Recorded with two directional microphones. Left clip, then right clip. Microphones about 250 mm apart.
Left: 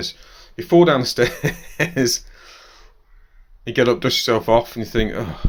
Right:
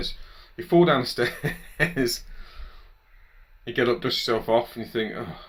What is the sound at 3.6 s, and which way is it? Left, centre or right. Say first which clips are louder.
Speech: left 6 dB; left.